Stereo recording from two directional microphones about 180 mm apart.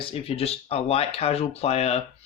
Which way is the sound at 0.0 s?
30° left (ahead or behind).